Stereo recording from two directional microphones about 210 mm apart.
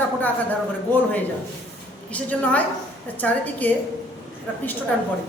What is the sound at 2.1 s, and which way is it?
A woman's voice, 5° left (ahead or behind).